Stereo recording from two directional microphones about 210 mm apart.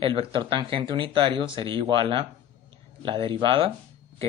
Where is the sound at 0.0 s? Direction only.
25° right (ahead or behind).